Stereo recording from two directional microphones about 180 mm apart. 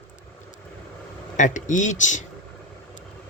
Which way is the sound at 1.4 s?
45° left (ahead or behind).